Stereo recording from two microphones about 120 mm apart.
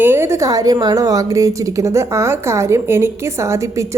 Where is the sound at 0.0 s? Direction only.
20° right (ahead or behind).